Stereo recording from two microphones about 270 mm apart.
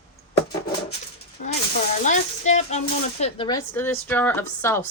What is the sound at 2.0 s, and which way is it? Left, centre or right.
Speech, left.